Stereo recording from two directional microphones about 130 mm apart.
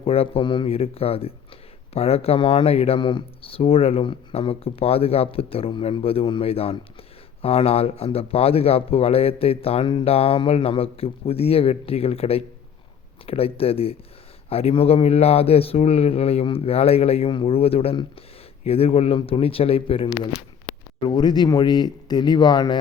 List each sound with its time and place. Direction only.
0.0 s speech: 50° left (ahead or behind)
21.0 s speech: 35° left (ahead or behind)